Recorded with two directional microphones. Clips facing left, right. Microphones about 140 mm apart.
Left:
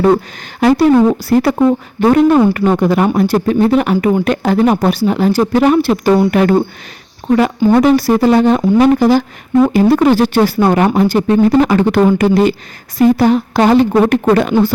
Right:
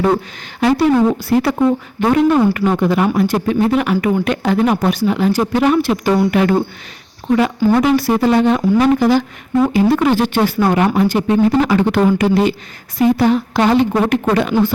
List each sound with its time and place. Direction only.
0.0 s speech: 40° left (ahead or behind)
7.8 s speech: 35° left (ahead or behind)